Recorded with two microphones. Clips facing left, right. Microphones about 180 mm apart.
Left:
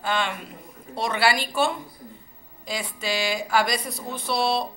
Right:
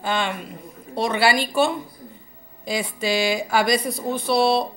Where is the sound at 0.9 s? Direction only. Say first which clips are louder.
Right 3 dB; centre (ahead or behind).